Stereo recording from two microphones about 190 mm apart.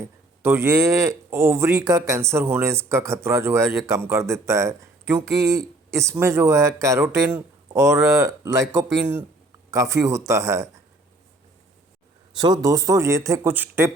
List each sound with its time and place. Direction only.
0.0 s speech: 15° right (ahead or behind)
9.7 s speech: 15° right (ahead or behind)
12.4 s speech: 20° right (ahead or behind)